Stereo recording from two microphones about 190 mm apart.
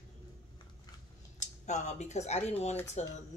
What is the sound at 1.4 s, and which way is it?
A woman's voice, 40° left (ahead or behind).